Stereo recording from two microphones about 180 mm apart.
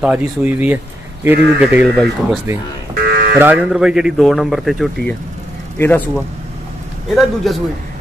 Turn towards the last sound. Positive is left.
turn(degrees=0)  # may be behind; listen again after turning